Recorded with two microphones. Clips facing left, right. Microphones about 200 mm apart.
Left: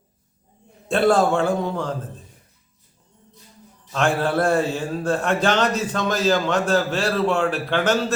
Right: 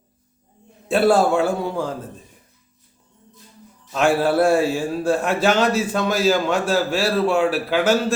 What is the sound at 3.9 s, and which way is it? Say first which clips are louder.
A man's voice: right 3 dB; 10° right (ahead or behind).